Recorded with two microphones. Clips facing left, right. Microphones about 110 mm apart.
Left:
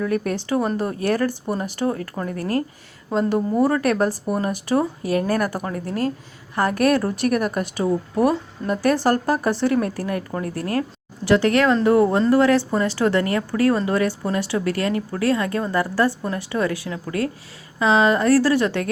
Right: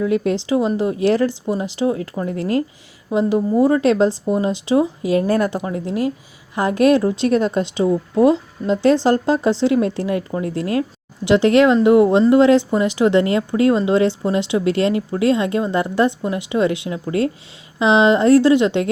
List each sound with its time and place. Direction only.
0.0 s speech: 20° right (ahead or behind)
2.2 s speech: 25° right (ahead or behind)